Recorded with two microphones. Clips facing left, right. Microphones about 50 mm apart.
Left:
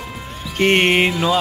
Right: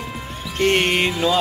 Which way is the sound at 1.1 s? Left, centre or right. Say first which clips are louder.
Left 1 dB; centre.